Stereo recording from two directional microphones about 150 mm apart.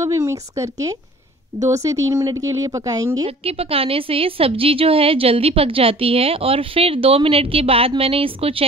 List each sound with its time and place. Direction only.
0.0 s speech: 20° right (ahead or behind)
3.1 s a woman's voice: 40° right (ahead or behind)